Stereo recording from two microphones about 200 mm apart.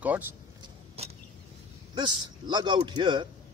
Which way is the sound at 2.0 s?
20° right (ahead or behind).